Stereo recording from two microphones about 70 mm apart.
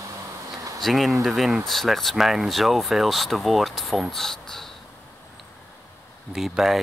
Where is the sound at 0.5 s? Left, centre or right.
Right.